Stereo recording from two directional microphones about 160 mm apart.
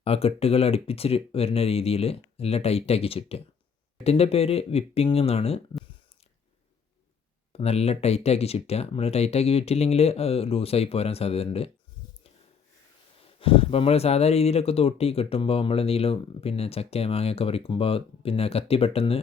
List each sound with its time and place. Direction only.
0.0 s speech: 40° left (ahead or behind)
7.5 s speech: 40° left (ahead or behind)
13.4 s speech: 35° left (ahead or behind)